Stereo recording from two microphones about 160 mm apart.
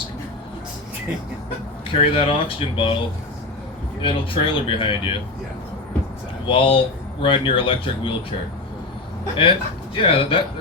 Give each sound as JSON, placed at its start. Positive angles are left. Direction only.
{"t": 1.9, "sound": "speech", "side_deg": 35}
{"t": 4.0, "sound": "speech", "side_deg": 30}
{"t": 6.4, "sound": "speech", "side_deg": 30}
{"t": 9.3, "sound": "speech", "side_deg": 30}